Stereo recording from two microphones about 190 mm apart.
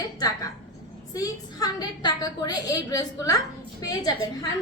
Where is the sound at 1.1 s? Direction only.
20° left (ahead or behind).